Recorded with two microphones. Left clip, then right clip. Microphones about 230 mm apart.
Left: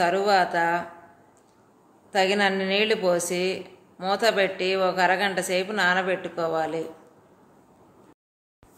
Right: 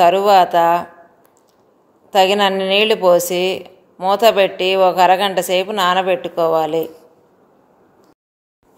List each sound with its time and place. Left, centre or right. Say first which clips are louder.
0.0 s a woman's voice: right 10 dB; right
2.0 s a woman's voice: right 9 dB; right